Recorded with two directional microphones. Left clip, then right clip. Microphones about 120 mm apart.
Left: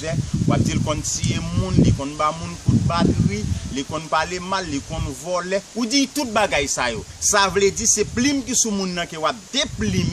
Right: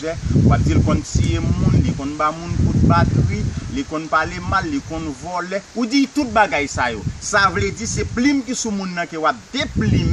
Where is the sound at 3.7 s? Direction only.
25° left (ahead or behind).